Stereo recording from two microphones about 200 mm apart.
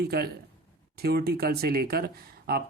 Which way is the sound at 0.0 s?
50° right (ahead or behind).